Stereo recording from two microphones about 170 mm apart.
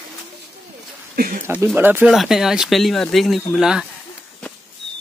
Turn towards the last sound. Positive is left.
turn(degrees=-5)  # may be behind; listen again after turning